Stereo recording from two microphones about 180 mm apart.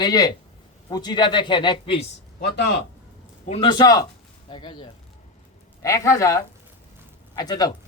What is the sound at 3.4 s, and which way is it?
A man's voice, 30° left (ahead or behind).